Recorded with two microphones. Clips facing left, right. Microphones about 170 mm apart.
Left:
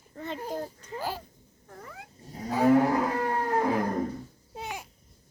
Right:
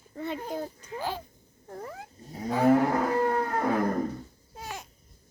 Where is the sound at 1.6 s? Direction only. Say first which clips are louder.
Right 7 dB; 35° right (ahead or behind).